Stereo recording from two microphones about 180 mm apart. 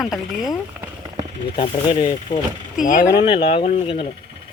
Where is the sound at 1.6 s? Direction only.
35° left (ahead or behind).